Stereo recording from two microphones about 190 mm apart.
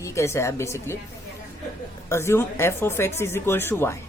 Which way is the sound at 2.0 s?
15° left (ahead or behind).